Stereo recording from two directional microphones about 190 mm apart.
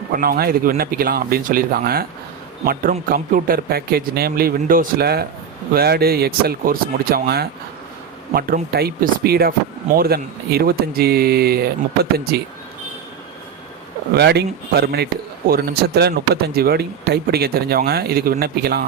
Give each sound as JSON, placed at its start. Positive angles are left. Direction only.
{"t": 0.1, "sound": "speech", "side_deg": -50}
{"t": 3.1, "sound": "speech", "side_deg": -50}
{"t": 14.1, "sound": "speech", "side_deg": -60}